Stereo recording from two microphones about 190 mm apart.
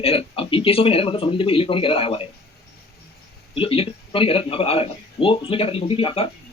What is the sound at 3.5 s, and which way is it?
A man's voice, 30° left (ahead or behind).